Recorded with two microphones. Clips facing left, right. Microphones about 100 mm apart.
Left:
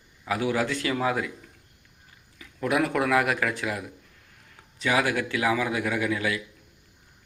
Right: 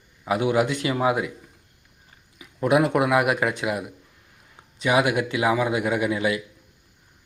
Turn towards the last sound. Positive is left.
turn(degrees=-20)  # may be behind; listen again after turning